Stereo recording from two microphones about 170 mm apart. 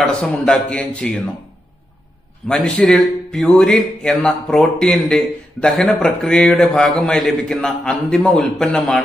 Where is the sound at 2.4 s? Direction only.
5° left (ahead or behind).